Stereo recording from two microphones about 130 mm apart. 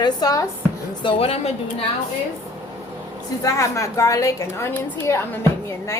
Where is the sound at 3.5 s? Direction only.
25° left (ahead or behind).